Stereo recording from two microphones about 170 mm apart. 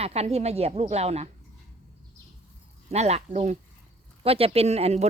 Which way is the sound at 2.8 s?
40° right (ahead or behind).